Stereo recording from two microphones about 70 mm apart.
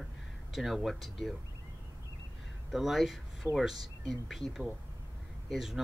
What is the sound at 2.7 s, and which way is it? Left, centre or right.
Speech, centre.